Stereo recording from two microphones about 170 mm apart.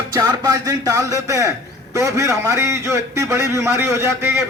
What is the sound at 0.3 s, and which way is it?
A man's voice, 20° right (ahead or behind).